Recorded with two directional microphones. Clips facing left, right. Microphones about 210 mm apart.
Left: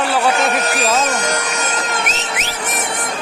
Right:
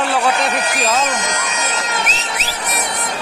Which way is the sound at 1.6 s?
50° left (ahead or behind).